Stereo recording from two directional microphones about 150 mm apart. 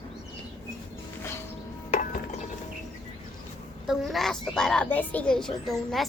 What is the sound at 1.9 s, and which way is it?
Stir, 60° left (ahead or behind).